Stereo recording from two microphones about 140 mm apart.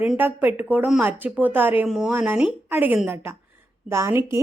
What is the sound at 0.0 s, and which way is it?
Speech, 10° right (ahead or behind).